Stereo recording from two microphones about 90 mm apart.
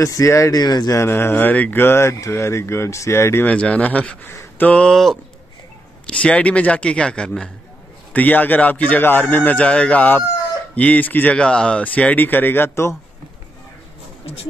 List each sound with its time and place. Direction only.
0.0 s speech: 35° left (ahead or behind)
0.6 s speech: 45° left (ahead or behind)
0.9 s speech: 25° left (ahead or behind)
3.4 s speech: 15° left (ahead or behind)
4.3 s a sound: 30° left (ahead or behind)
4.6 s speech: 10° left (ahead or behind); by 12.9 s 25° left (ahead or behind)
14.2 s speech: 90° left